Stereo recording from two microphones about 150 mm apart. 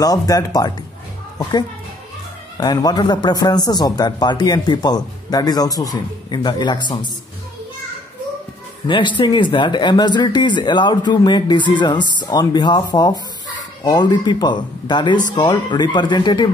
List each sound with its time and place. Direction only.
0.0 s speech: 25° left (ahead or behind)
2.5 s speech: 25° left (ahead or behind)
8.8 s speech: 30° left (ahead or behind)